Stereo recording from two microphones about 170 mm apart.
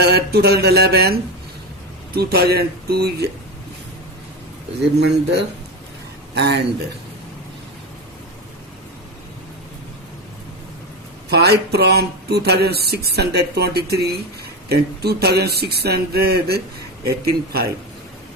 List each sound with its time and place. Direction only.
0.0 s speech: 70° right (ahead or behind)
4.9 s speech: 75° right (ahead or behind)
11.3 s speech: 70° right (ahead or behind)